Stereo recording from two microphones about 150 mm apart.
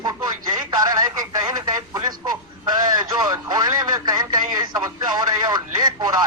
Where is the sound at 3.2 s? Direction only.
25° right (ahead or behind).